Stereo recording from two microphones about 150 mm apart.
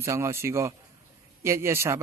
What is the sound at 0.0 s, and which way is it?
Speech, 20° right (ahead or behind).